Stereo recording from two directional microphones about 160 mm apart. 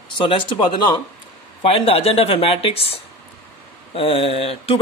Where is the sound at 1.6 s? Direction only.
35° left (ahead or behind).